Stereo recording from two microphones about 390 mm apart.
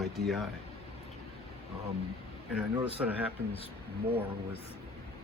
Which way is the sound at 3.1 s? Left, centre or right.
Centre.